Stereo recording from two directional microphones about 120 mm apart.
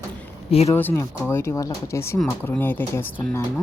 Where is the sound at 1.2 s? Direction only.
20° left (ahead or behind).